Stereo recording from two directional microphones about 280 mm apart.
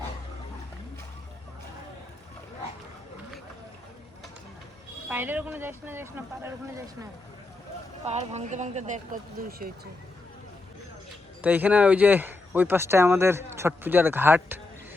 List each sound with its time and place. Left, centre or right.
5.0 s speech: centre
8.0 s speech: right
11.4 s speech: centre